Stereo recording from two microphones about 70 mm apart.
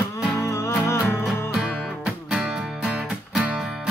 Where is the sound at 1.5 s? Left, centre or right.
Centre.